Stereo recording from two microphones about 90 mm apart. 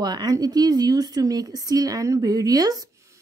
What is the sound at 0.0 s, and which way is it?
Speech, 50° right (ahead or behind).